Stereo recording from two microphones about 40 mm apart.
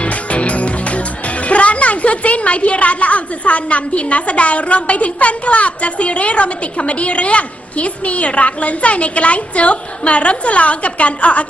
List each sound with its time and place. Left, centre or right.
0.0 s speech: left